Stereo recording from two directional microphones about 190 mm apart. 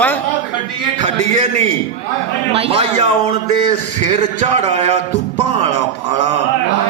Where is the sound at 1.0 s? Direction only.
35° right (ahead or behind).